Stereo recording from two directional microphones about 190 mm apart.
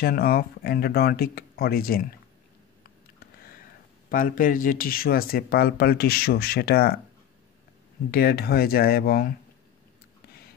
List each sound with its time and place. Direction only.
0.0 s speech: 50° left (ahead or behind)
4.1 s speech: 45° left (ahead or behind)
8.1 s speech: 50° left (ahead or behind)